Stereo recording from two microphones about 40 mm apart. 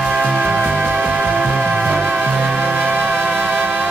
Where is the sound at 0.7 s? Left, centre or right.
Right.